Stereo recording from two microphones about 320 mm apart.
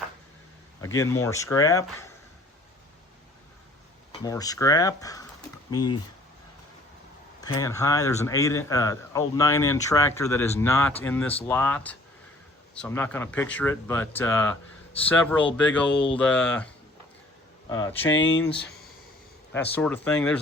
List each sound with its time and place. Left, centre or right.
0.8 s speech: centre
4.1 s speech: centre
7.4 s speech: centre
17.7 s speech: centre
18.1 s speech: left
19.5 s speech: centre